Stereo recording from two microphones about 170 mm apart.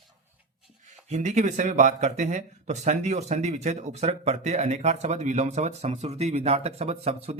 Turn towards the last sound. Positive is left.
turn(degrees=-35)  # may be behind; listen again after turning